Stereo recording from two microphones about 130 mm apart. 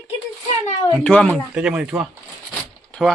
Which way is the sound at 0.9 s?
5° left (ahead or behind).